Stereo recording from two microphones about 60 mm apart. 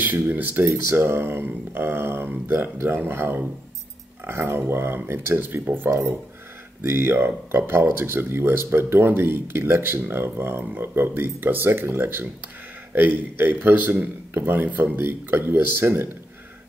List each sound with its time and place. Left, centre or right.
0.0 s speech: right
0.6 s speech: right